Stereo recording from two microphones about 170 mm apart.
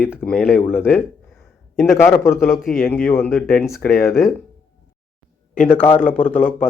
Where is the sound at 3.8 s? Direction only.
Centre (ahead or behind).